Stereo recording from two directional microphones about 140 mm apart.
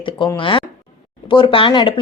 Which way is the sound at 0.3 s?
40° left (ahead or behind).